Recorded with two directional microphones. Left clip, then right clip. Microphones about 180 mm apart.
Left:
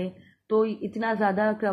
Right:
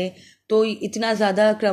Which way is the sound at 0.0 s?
30° right (ahead or behind).